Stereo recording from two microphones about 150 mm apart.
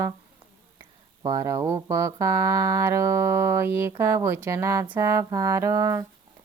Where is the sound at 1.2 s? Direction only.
25° right (ahead or behind).